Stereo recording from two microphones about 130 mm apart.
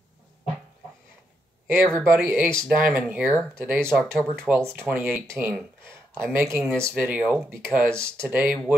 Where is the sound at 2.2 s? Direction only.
15° right (ahead or behind).